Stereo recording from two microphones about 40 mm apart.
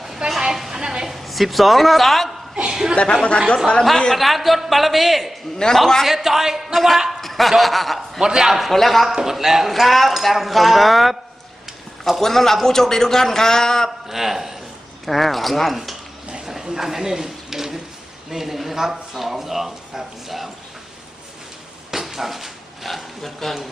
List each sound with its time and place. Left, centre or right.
0.3 s a sound: centre
1.0 s a woman's voice: centre
2.6 s chuckle: centre
2.9 s speech: left
4.1 s a man's voice: centre
8.2 s a man's voice: centre
8.7 s speech: centre
9.0 s speech: centre
12.2 s a man's voice: centre
14.1 s a man's voice: centre
16.3 s a sound: centre
18.3 s a man's voice: centre
21.9 s dog: centre